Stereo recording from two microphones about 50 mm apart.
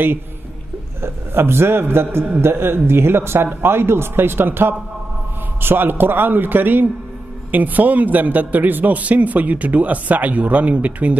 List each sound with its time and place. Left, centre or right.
1.0 s a man's voice: right